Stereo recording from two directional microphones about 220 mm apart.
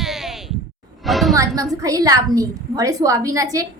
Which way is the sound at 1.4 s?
15° right (ahead or behind).